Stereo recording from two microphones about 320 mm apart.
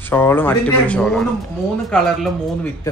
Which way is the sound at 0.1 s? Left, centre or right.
Centre.